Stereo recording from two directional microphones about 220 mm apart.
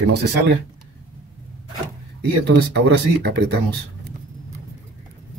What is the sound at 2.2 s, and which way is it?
Speech, 50° right (ahead or behind).